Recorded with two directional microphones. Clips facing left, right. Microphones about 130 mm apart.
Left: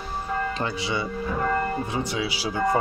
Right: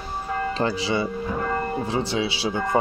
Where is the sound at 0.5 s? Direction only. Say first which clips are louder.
Right 4 dB; 30° right (ahead or behind).